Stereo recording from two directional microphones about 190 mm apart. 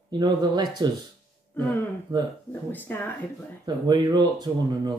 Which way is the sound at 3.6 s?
20° right (ahead or behind).